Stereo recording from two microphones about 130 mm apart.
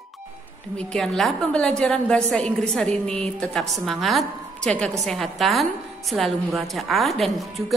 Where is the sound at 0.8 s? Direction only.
5° left (ahead or behind).